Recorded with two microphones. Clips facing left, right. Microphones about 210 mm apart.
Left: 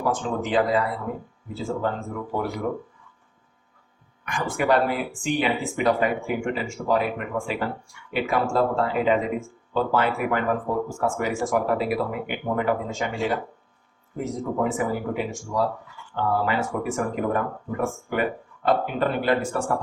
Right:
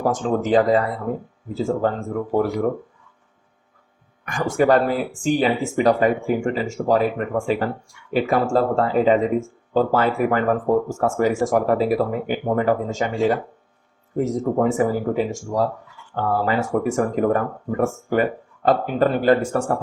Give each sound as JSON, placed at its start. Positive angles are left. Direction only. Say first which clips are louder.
{"t": 0.0, "sound": "speech", "louder": "right 5 dB", "side_deg": -45}
{"t": 4.3, "sound": "speech", "louder": "right 5 dB", "side_deg": -45}